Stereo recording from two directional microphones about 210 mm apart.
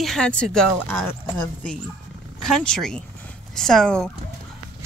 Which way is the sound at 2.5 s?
5° left (ahead or behind).